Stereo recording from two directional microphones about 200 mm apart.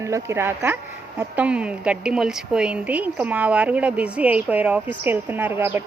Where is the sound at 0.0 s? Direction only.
15° right (ahead or behind).